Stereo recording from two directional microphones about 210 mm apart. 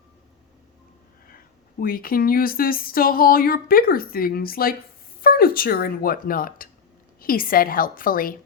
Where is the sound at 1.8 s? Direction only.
45° left (ahead or behind).